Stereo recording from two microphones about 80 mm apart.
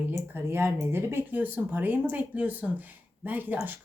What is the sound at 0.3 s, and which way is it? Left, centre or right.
Speech, right.